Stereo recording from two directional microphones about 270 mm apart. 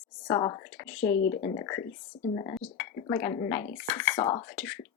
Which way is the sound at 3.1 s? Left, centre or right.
Centre.